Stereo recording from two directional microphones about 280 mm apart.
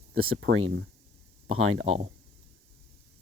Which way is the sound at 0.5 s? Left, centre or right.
Right.